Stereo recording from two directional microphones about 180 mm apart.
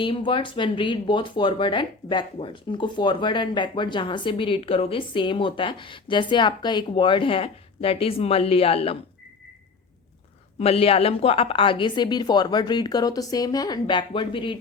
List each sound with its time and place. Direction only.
0.0 s speech: 25° left (ahead or behind)
10.6 s speech: 35° left (ahead or behind)